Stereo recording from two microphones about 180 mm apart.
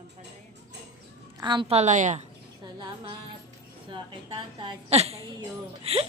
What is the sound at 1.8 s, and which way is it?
Speech, 40° right (ahead or behind).